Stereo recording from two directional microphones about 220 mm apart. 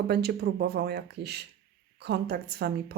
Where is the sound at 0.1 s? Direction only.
45° right (ahead or behind).